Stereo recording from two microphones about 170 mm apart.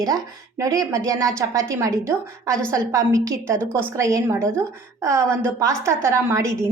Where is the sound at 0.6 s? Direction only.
20° right (ahead or behind).